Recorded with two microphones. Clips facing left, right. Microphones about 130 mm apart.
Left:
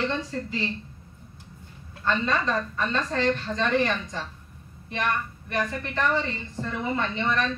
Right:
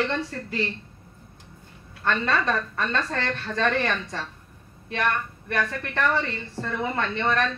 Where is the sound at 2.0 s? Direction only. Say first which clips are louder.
Right 1 dB; 65° right (ahead or behind).